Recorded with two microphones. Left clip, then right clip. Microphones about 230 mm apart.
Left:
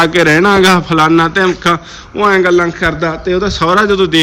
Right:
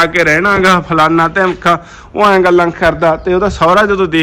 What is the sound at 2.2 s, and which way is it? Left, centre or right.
Speech, right.